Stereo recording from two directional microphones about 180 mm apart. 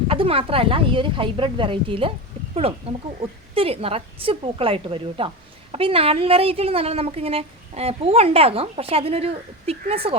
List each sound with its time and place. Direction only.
0.1 s a woman's voice: 30° right (ahead or behind)